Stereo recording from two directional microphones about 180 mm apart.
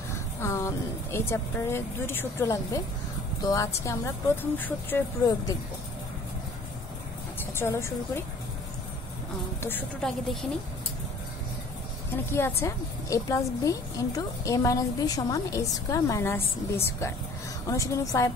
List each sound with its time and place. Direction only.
0.4 s a woman's voice: 15° left (ahead or behind)
7.5 s a woman's voice: 15° left (ahead or behind)
9.6 s a woman's voice: 10° left (ahead or behind)
12.3 s a woman's voice: 15° left (ahead or behind)